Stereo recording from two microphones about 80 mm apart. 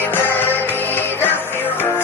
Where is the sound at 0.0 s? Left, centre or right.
Left.